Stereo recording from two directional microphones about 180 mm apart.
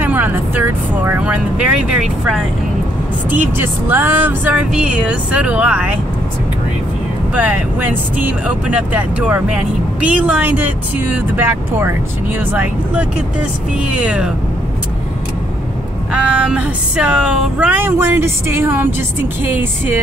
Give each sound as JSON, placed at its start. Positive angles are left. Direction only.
{"t": 0.0, "sound": "speech", "side_deg": -10}
{"t": 7.3, "sound": "speech", "side_deg": -10}
{"t": 16.1, "sound": "speech", "side_deg": -5}